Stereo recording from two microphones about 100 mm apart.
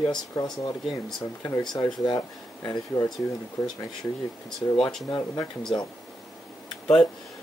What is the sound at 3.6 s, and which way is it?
Speech, 25° left (ahead or behind).